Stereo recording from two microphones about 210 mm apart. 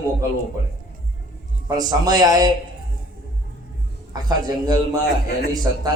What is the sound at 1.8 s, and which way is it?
Speech, 20° right (ahead or behind).